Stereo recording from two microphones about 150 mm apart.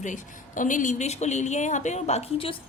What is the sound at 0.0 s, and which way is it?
A woman's voice, 55° left (ahead or behind).